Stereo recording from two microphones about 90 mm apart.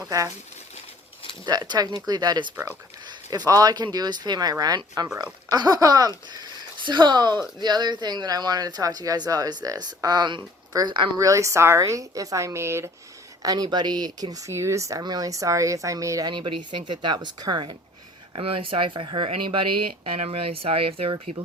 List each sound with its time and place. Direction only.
0.0 s speech: 40° right (ahead or behind)
1.5 s speech: 50° right (ahead or behind)
11.2 s speech: 35° right (ahead or behind)
13.4 s speech: 45° right (ahead or behind)
16.3 s speech: 60° right (ahead or behind)
18.3 s speech: 90° right